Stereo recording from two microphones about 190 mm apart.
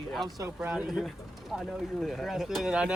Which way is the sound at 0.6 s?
5° right (ahead or behind).